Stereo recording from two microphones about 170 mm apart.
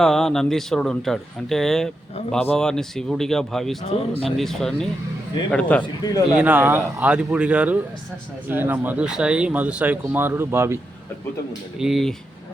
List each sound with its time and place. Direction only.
0.0 s speech: centre (ahead or behind)
3.8 s speech: 35° left (ahead or behind)
4.3 s speech: centre (ahead or behind)
6.0 s a man's voice: 20° left (ahead or behind)
6.4 s speech: 10° right (ahead or behind)
11.8 s speech: centre (ahead or behind)